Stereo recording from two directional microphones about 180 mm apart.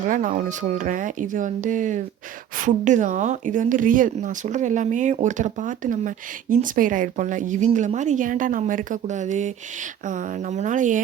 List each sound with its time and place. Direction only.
0.1 s speech: 45° right (ahead or behind)